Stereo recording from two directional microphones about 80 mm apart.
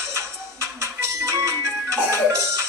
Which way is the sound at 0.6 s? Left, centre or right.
Right.